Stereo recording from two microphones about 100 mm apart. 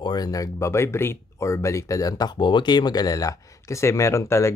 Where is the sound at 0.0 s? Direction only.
40° left (ahead or behind).